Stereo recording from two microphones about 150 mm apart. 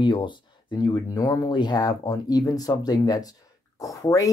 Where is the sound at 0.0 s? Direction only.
30° left (ahead or behind).